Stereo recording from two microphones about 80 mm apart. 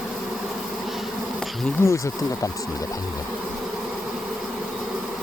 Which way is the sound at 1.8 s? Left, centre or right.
Left.